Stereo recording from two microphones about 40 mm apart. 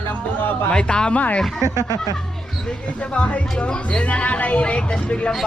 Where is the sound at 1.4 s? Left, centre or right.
Centre.